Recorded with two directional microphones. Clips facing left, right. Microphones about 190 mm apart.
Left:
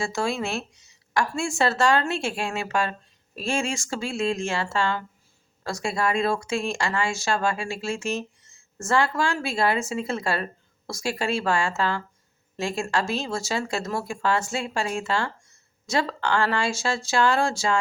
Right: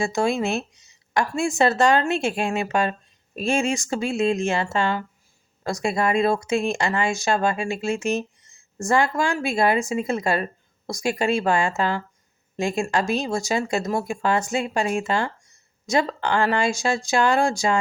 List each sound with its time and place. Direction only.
0.0 s speech: 20° right (ahead or behind)